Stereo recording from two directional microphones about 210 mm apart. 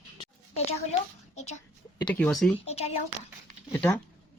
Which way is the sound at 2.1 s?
5° left (ahead or behind).